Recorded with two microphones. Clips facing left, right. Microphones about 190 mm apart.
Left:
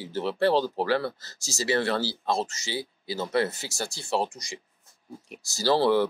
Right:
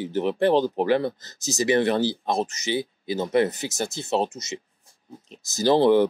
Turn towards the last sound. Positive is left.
turn(degrees=-20)  # may be behind; listen again after turning